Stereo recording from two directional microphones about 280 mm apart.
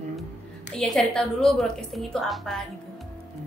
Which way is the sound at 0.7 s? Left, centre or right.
Centre.